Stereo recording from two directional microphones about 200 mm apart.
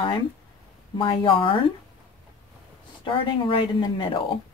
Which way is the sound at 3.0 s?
25° left (ahead or behind).